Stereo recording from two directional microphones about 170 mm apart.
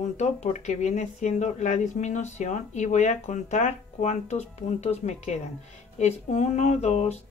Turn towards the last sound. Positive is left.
turn(degrees=40)  # may be behind; listen again after turning